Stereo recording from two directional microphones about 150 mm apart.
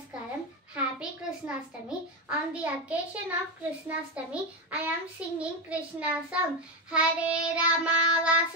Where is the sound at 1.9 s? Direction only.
10° right (ahead or behind).